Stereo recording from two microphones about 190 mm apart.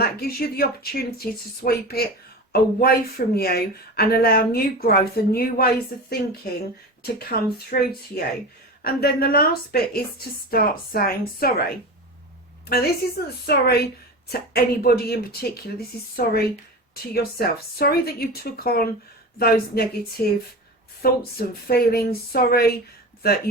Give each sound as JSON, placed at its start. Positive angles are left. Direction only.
{"t": 0.0, "sound": "speech", "side_deg": 55}
{"t": 12.6, "sound": "a woman's voice", "side_deg": 55}
{"t": 21.0, "sound": "speech", "side_deg": 55}